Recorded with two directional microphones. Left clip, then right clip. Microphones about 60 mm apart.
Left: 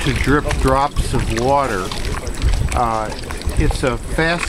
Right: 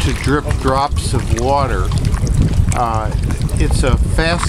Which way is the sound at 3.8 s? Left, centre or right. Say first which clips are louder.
Right 1 dB; right.